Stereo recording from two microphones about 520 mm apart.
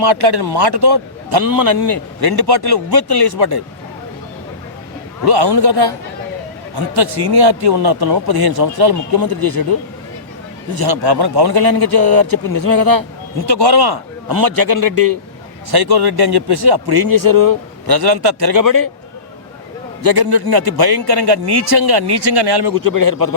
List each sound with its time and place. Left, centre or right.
0.0 s a man's voice: right
5.2 s a man's voice: right
10.8 s a man's voice: right
20.0 s a man's voice: right